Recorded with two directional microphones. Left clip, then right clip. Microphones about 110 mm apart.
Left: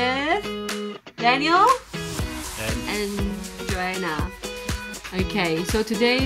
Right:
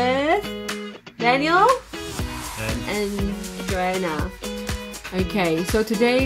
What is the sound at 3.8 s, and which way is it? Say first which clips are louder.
A woman's voice: right 3 dB; 5° left (ahead or behind).